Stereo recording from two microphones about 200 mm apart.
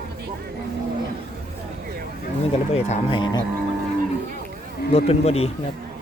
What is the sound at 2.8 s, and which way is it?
Speech, 30° left (ahead or behind).